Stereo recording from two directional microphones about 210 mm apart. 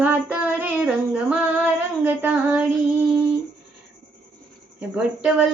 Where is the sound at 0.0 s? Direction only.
5° right (ahead or behind).